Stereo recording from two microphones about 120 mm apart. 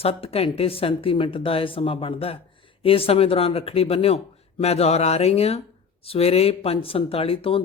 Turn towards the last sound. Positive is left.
turn(degrees=50)  # may be behind; listen again after turning